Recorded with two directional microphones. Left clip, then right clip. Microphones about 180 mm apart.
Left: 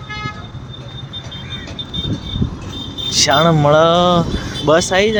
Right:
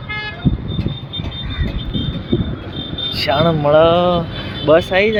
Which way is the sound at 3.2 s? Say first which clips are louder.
Left 3 dB; 15° left (ahead or behind).